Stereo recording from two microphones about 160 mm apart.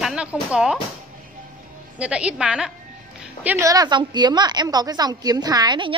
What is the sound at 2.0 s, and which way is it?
A woman's voice, 5° right (ahead or behind).